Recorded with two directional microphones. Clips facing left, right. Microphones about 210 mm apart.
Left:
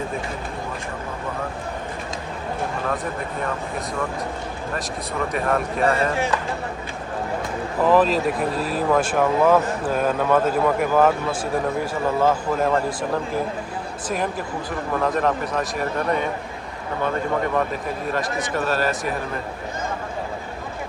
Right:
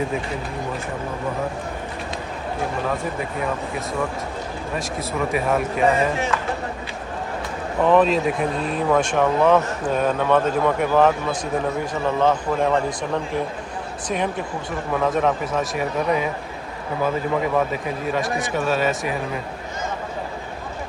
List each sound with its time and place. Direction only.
5.3 s speech: 5° right (ahead or behind)
7.8 s speech: centre (ahead or behind)